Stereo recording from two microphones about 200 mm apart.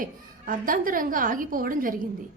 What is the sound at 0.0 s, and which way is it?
A woman's voice, 45° right (ahead or behind).